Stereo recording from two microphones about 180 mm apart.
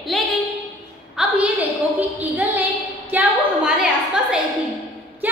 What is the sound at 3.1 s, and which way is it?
Speech, 5° right (ahead or behind).